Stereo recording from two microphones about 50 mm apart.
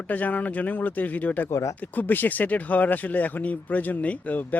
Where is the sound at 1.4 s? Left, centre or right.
Left.